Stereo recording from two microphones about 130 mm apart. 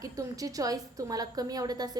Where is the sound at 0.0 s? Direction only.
25° right (ahead or behind).